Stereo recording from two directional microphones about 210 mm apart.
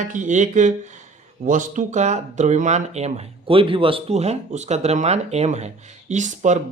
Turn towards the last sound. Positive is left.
turn(degrees=-35)  # may be behind; listen again after turning